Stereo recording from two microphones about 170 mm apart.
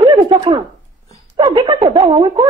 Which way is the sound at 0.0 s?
25° right (ahead or behind).